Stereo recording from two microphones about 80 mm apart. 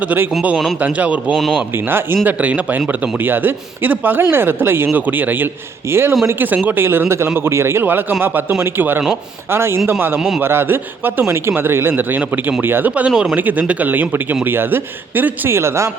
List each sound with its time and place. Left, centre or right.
0.8 s a man's voice: centre
1.5 s speech: right
2.2 s speech: centre
10.2 s a man's voice: centre
10.4 s speech: right